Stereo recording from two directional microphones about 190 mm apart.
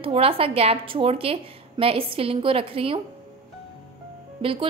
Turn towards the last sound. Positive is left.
turn(degrees=-30)  # may be behind; listen again after turning